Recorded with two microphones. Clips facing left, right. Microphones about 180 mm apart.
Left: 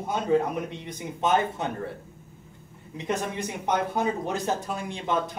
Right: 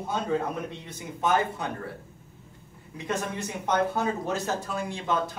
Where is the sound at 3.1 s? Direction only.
15° left (ahead or behind).